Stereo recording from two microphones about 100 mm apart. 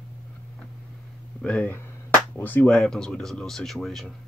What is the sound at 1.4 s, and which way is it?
A man's voice, 10° left (ahead or behind).